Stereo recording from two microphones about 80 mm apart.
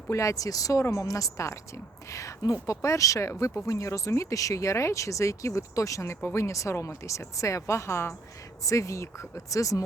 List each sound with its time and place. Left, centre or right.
0.1 s speech: left